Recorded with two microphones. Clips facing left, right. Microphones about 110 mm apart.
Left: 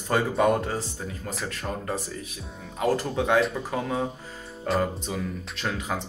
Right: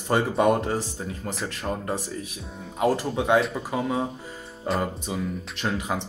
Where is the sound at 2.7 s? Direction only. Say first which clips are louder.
Right 1 dB; 15° right (ahead or behind).